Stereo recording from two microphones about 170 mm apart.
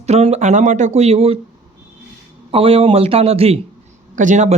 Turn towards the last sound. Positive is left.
turn(degrees=-45)  # may be behind; listen again after turning